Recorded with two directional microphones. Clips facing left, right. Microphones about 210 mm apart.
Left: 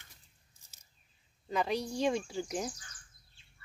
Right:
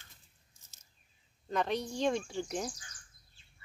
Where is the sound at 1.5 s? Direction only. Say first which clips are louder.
Even; 5° left (ahead or behind).